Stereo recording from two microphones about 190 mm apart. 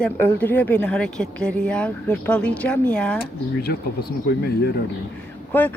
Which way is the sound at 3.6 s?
55° left (ahead or behind).